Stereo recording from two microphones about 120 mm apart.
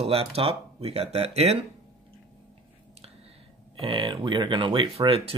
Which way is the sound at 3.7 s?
45° right (ahead or behind).